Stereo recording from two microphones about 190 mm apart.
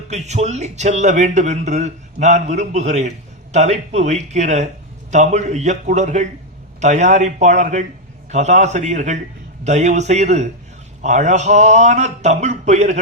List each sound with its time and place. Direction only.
0.1 s speech: 35° right (ahead or behind)